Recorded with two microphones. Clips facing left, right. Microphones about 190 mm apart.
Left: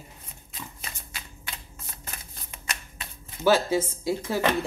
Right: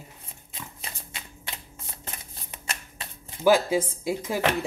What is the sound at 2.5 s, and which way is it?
Shuffling cards, 25° right (ahead or behind).